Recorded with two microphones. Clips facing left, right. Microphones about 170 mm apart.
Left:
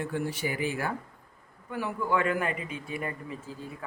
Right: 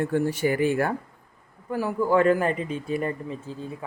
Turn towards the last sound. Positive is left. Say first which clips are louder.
# right 6 dB
turn(degrees=-35)  # may be behind; listen again after turning